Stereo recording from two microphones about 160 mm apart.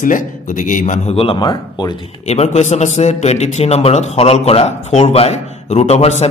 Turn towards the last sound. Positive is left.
turn(degrees=40)  # may be behind; listen again after turning